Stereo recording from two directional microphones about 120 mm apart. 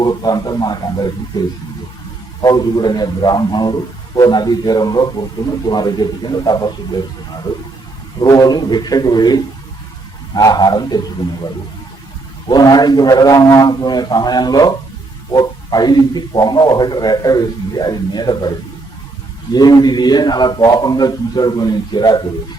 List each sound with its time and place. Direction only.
0.0 s a man's voice: 35° left (ahead or behind)
2.4 s a man's voice: 35° left (ahead or behind)
8.2 s a man's voice: 30° left (ahead or behind)
12.5 s a man's voice: 35° left (ahead or behind)
19.5 s a man's voice: 35° left (ahead or behind)